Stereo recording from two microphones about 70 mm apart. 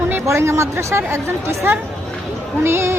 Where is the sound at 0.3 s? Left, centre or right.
Right.